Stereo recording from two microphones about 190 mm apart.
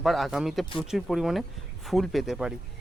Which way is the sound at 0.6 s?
25° left (ahead or behind).